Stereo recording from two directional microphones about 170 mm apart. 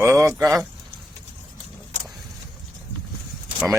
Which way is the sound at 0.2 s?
15° right (ahead or behind).